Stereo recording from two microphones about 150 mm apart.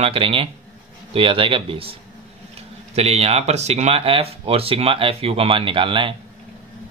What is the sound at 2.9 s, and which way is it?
Speech, 45° right (ahead or behind).